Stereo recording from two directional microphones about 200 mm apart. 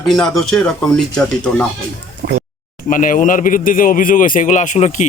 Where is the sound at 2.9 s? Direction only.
40° left (ahead or behind).